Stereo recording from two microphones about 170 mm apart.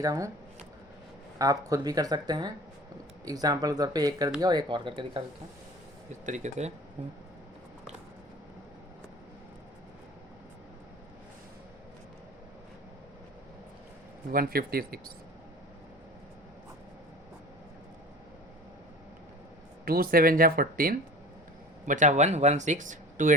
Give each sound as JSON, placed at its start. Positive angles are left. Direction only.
{"t": 0.0, "sound": "speech", "side_deg": -20}
{"t": 1.4, "sound": "speech", "side_deg": -20}
{"t": 6.1, "sound": "speech", "side_deg": -45}
{"t": 14.3, "sound": "speech", "side_deg": -60}
{"t": 19.8, "sound": "speech", "side_deg": -60}
{"t": 21.8, "sound": "speech", "side_deg": -45}